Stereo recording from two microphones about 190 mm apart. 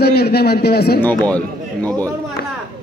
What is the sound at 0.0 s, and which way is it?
A man's voice, 55° left (ahead or behind).